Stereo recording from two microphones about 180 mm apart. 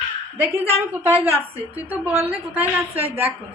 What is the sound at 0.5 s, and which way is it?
A woman's voice, 10° right (ahead or behind).